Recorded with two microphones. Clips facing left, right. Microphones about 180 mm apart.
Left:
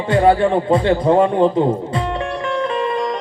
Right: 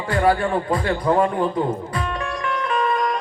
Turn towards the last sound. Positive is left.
turn(degrees=25)  # may be behind; listen again after turning